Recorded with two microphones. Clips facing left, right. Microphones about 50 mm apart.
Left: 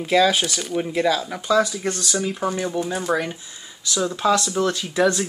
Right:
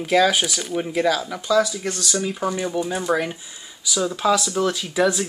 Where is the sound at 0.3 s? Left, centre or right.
Centre.